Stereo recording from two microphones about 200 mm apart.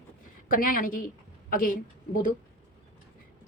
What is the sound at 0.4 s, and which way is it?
A woman's voice, 45° left (ahead or behind).